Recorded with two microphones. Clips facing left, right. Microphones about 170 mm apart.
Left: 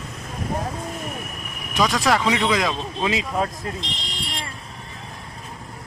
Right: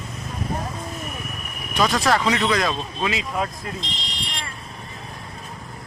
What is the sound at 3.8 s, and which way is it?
Vehicle, 60° left (ahead or behind).